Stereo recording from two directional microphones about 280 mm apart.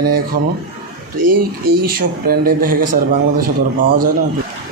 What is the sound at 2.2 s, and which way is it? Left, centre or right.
A man's voice, right.